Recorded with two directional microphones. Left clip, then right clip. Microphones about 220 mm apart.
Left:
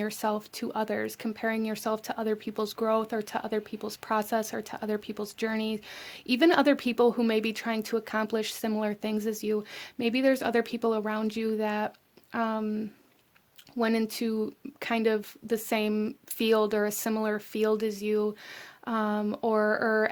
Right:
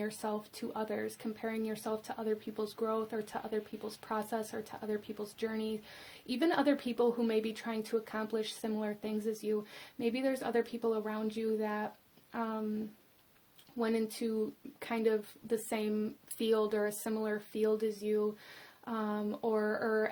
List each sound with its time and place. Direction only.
0.0 s speech: 45° left (ahead or behind)
13.7 s speech: 45° left (ahead or behind)